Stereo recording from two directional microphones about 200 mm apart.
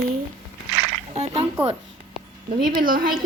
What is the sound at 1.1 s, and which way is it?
Speech, 30° right (ahead or behind).